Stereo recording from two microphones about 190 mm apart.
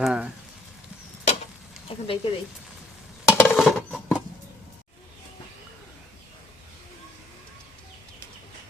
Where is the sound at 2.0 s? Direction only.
30° left (ahead or behind).